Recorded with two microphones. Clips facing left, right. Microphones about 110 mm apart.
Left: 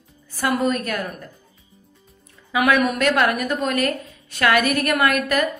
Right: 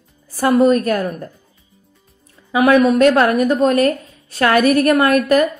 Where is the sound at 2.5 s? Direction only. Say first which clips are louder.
Right 7 dB; 30° right (ahead or behind).